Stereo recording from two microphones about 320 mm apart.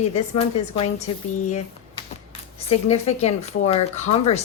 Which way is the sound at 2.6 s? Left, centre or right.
Centre.